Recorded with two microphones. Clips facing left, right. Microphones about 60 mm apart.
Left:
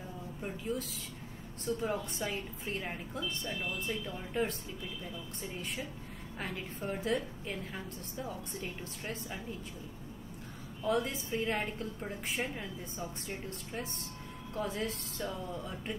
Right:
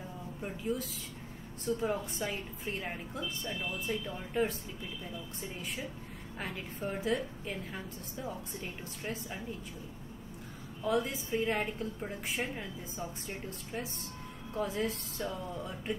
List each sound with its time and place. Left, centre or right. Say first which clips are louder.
0.4 s a woman's voice: right 2 dB; centre
6.4 s a woman's voice: even; centre
10.8 s a woman's voice: right 1 dB; centre